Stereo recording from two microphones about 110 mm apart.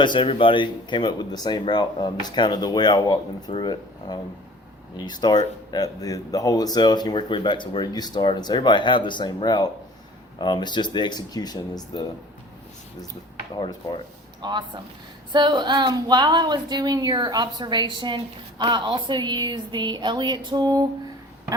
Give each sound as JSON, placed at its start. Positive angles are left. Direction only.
{"t": 0.0, "sound": "speech", "side_deg": 50}
{"t": 13.6, "sound": "speech", "side_deg": 45}
{"t": 14.4, "sound": "a woman's voice", "side_deg": -45}